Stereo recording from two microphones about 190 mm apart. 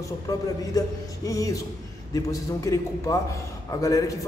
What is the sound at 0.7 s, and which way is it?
A man's voice, 20° left (ahead or behind).